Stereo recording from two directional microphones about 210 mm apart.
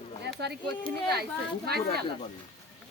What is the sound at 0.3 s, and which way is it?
Speech, 50° right (ahead or behind).